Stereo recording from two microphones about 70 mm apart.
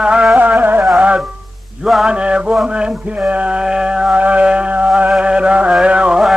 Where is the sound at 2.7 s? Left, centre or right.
Centre.